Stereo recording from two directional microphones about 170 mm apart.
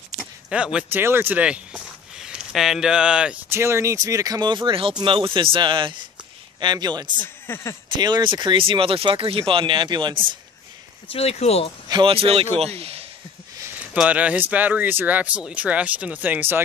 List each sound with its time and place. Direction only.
0.2 s speech: 5° right (ahead or behind); by 7.1 s 25° right (ahead or behind)
7.4 s speech: 15° left (ahead or behind)
7.9 s speech: 25° right (ahead or behind)
11.1 s speech: 35° left (ahead or behind)
11.9 s speech: 30° right (ahead or behind)
13.7 s speech: 10° right (ahead or behind)